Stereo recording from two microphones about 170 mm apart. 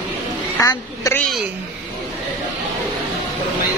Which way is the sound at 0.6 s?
20° left (ahead or behind).